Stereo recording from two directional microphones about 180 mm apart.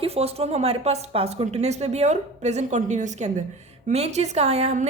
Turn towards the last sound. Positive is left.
turn(degrees=-35)  # may be behind; listen again after turning